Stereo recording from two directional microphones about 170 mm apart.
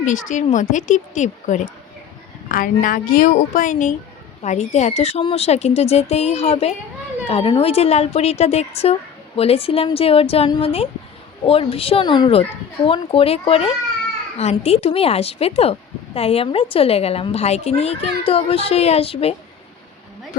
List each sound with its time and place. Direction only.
0.0 s speech: 45° left (ahead or behind)
2.8 s a woman's voice: 50° left (ahead or behind); by 19.3 s 35° left (ahead or behind)